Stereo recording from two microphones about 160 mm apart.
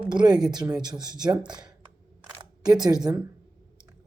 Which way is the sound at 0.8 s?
25° right (ahead or behind).